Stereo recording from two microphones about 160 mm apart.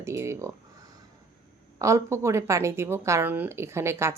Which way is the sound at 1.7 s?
20° right (ahead or behind).